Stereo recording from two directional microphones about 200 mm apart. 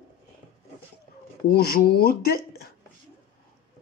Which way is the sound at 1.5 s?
50° left (ahead or behind).